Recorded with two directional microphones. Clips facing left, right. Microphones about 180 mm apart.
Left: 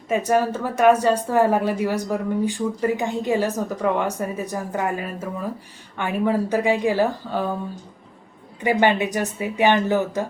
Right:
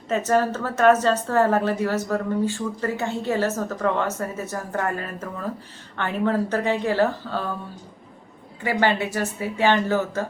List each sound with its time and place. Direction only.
0.1 s a woman's voice: 10° left (ahead or behind)
8.6 s a woman's voice: 20° left (ahead or behind)